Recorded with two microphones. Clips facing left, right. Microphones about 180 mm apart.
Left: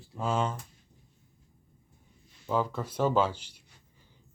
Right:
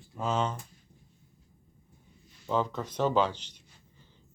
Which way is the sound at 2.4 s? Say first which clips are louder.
Even; 10° left (ahead or behind).